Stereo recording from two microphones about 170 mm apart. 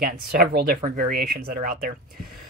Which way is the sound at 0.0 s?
60° right (ahead or behind).